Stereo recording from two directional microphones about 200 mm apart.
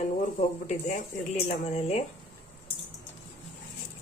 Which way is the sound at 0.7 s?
35° left (ahead or behind).